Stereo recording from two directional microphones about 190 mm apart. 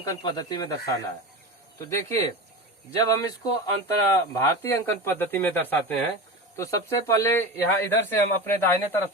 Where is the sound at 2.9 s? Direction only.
20° left (ahead or behind).